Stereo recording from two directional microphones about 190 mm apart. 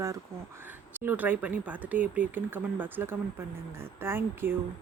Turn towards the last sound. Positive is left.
turn(degrees=-10)  # may be behind; listen again after turning